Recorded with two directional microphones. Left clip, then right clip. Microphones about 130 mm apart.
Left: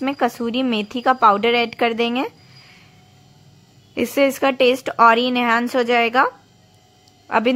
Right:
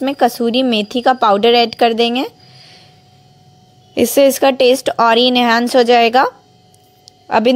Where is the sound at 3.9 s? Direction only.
25° right (ahead or behind).